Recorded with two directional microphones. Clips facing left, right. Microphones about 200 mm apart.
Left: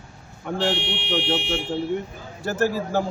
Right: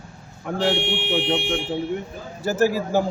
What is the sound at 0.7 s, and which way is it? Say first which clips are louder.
Speech: right 4 dB; 50° right (ahead or behind).